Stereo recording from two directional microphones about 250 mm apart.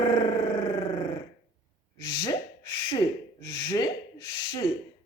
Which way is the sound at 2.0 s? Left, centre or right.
Centre.